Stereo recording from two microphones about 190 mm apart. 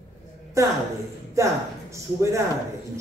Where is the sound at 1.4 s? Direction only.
15° right (ahead or behind).